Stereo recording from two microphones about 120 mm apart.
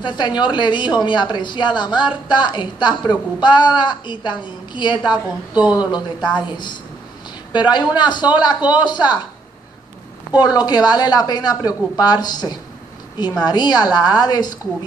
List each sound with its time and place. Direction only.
0.0 s a woman's voice: 40° left (ahead or behind)
5.1 s a woman's voice: 10° right (ahead or behind)
5.7 s a woman's voice: 35° left (ahead or behind)
10.4 s a woman's voice: 35° left (ahead or behind)